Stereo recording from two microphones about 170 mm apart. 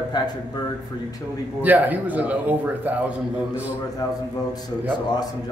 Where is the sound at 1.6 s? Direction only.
10° right (ahead or behind).